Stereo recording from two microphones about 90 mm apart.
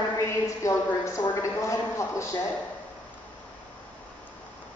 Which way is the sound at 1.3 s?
35° left (ahead or behind).